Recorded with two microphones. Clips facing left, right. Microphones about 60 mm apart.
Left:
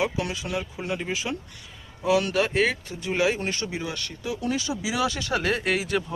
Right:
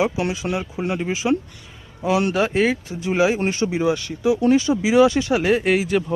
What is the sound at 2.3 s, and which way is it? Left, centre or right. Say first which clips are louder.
Speech: right 4 dB; centre.